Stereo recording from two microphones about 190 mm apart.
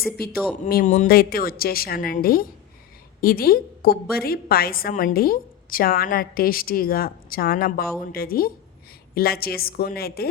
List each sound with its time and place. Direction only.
0.6 s a woman's voice: 45° left (ahead or behind)